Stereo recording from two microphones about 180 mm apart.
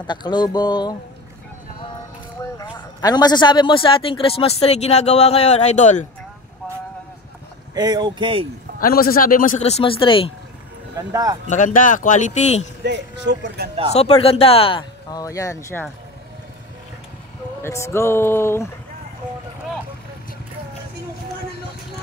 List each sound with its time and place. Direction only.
0.0 s speech: 25° left (ahead or behind)
2.5 s a man's voice: 25° left (ahead or behind); by 6.0 s 40° left (ahead or behind)
7.7 s speech: 20° right (ahead or behind)
8.8 s speech: 55° left (ahead or behind)
9.6 s a man's voice: 35° left (ahead or behind)
11.0 s speech: 20° right (ahead or behind)
11.4 s speech: 45° left (ahead or behind)
12.8 s speech: 75° right (ahead or behind)
13.9 s speech: 35° left (ahead or behind); by 15.8 s 15° left (ahead or behind)
17.6 s speech: 15° left (ahead or behind)